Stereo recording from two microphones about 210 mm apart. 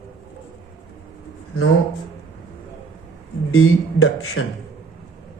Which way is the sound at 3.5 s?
80° left.